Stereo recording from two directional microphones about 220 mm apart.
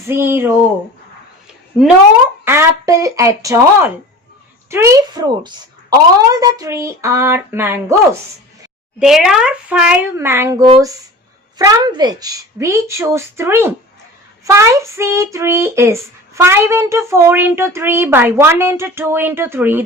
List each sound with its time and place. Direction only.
0.1 s speech: 10° right (ahead or behind)
2.4 s speech: 10° right (ahead or behind)